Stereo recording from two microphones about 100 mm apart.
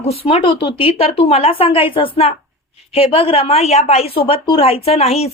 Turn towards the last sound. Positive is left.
turn(degrees=90)